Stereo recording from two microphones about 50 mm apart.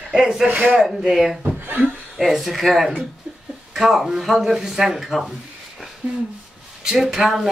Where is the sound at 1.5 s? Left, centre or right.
Right.